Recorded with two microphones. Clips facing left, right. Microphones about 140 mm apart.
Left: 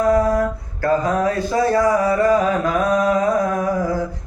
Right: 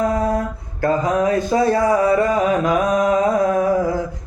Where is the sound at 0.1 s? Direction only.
20° right (ahead or behind).